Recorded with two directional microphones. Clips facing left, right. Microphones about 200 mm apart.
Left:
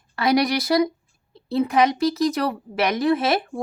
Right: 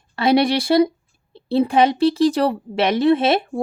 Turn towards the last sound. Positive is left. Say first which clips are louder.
# right 4 dB
turn(degrees=-25)  # may be behind; listen again after turning